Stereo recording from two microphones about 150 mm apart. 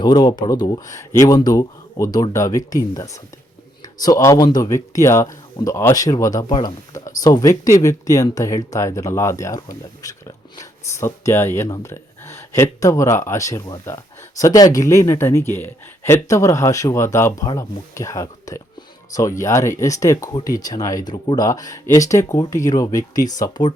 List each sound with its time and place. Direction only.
0.0 s speech: 30° left (ahead or behind)